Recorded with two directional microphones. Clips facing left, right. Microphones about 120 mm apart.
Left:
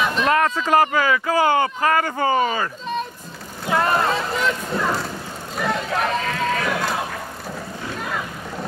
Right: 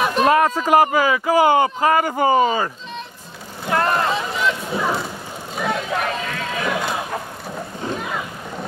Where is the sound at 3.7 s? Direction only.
Centre (ahead or behind).